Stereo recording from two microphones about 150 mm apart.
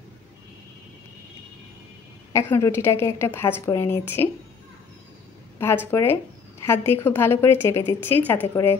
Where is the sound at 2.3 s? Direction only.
20° left (ahead or behind).